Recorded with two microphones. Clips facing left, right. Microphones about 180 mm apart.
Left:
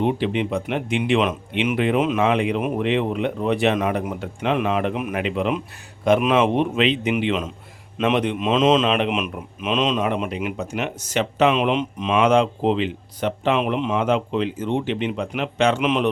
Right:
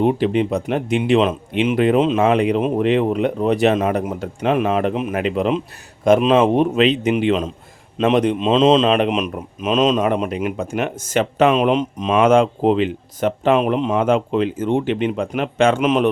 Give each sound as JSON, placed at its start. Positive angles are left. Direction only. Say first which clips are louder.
{"t": 0.0, "sound": "speech", "louder": "right 5 dB", "side_deg": -40}
{"t": 2.2, "sound": "speech", "louder": "right 4 dB", "side_deg": -40}
{"t": 2.6, "sound": "speech", "louder": "right 5 dB", "side_deg": -30}
{"t": 2.8, "sound": "speech", "louder": "right 4 dB", "side_deg": -40}
{"t": 6.5, "sound": "a man's voice", "louder": "right 4 dB", "side_deg": -40}